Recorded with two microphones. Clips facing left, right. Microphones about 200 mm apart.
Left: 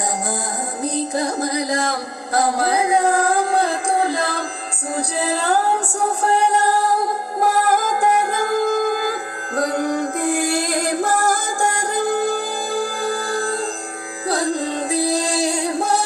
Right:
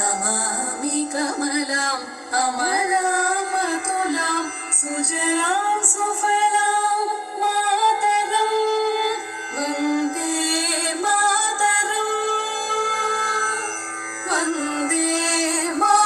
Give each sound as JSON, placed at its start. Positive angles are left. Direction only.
{"t": 0.8, "sound": "music", "side_deg": 20}